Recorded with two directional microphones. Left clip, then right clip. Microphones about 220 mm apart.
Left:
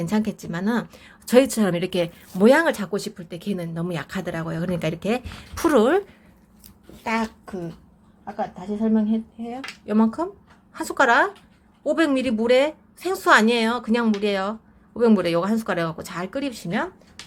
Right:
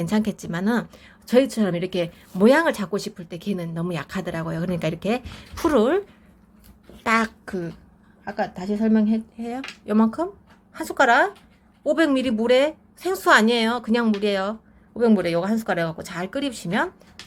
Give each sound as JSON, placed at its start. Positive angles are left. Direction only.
{"t": 0.0, "sound": "a woman's voice", "side_deg": 0}
{"t": 7.0, "sound": "speech", "side_deg": -15}
{"t": 7.4, "sound": "speech", "side_deg": -30}
{"t": 8.2, "sound": "a woman's voice", "side_deg": -45}
{"t": 9.8, "sound": "a woman's voice", "side_deg": -5}
{"t": 16.5, "sound": "speech", "side_deg": -10}